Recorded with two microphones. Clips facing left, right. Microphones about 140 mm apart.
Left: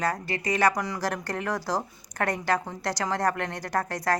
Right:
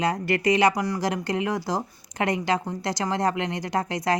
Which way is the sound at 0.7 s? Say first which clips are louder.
Right 4 dB; 5° right (ahead or behind).